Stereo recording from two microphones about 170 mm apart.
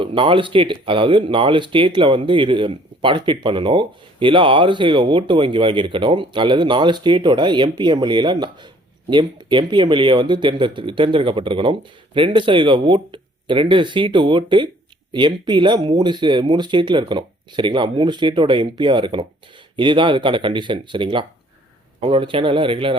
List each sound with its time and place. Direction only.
0.0 s speech: 30° right (ahead or behind)